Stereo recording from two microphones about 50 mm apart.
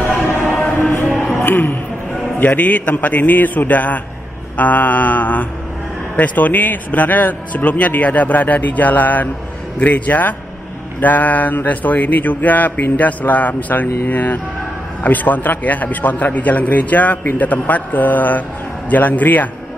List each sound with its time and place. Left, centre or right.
0.6 s music: left
1.4 s speech: left